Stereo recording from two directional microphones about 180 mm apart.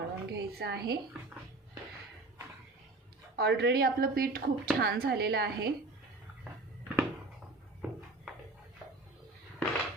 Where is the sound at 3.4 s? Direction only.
65° right (ahead or behind).